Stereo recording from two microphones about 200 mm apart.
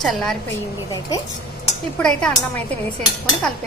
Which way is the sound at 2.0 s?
5° left (ahead or behind).